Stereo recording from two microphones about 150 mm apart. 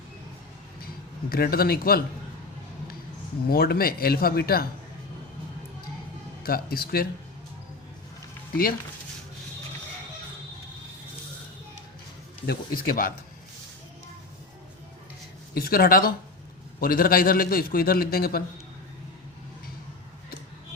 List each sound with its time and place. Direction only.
1.3 s a man's voice: 90° left
3.5 s speech: 90° left
6.4 s a man's voice: 80° left
12.5 s a man's voice: 75° left (ahead or behind)
15.5 s a man's voice: 85° left